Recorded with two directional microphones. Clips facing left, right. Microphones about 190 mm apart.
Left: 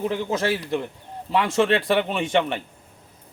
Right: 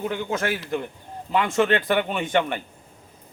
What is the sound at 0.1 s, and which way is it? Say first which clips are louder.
Speech: left 2 dB; 30° left (ahead or behind).